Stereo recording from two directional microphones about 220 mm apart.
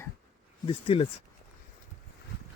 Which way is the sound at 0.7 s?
25° left (ahead or behind).